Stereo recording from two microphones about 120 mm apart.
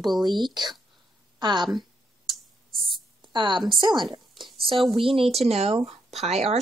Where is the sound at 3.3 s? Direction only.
40° right (ahead or behind).